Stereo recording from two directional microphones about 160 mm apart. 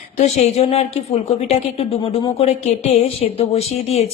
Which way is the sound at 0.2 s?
45° left (ahead or behind).